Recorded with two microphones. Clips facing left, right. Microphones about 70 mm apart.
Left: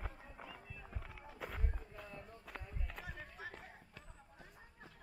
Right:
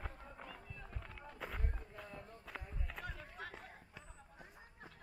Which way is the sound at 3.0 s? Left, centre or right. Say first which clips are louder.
Right 1 dB; right.